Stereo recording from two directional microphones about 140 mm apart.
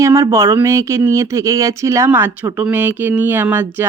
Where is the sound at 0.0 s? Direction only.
20° right (ahead or behind).